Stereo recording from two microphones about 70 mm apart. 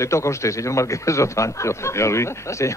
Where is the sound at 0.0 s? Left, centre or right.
Left.